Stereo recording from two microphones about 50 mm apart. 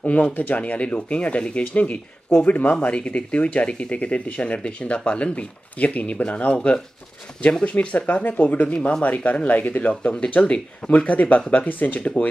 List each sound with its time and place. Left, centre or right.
0.0 s speech: left